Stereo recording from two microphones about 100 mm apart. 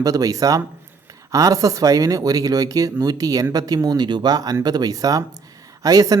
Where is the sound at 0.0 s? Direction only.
35° right (ahead or behind).